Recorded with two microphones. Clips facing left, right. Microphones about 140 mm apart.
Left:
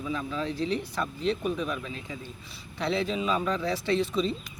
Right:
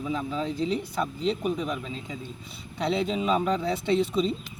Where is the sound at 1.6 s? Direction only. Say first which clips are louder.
Right 1 dB; 25° right (ahead or behind).